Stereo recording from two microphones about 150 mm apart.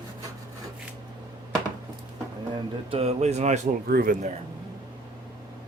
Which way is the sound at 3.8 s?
85° right.